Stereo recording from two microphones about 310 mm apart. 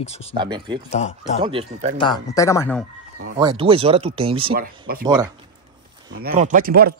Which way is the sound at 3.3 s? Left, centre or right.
Centre.